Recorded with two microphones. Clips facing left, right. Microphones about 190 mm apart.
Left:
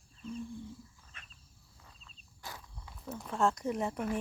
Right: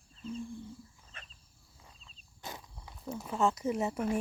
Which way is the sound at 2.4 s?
20° right (ahead or behind).